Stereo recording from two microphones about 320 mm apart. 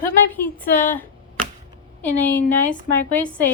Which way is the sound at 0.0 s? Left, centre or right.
Centre.